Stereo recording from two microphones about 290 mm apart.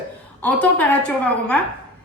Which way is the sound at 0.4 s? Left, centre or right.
Centre.